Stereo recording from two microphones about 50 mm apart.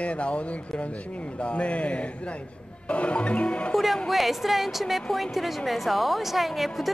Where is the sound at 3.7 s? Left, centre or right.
Centre.